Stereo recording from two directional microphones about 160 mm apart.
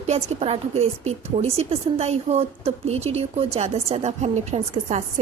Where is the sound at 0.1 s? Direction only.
40° right (ahead or behind).